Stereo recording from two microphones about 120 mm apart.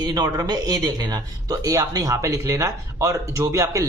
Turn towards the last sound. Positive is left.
turn(degrees=-25)  # may be behind; listen again after turning